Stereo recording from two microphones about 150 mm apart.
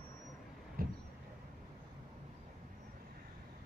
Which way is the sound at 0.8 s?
80° right.